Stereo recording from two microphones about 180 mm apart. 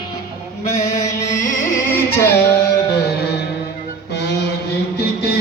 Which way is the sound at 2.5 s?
65° left (ahead or behind).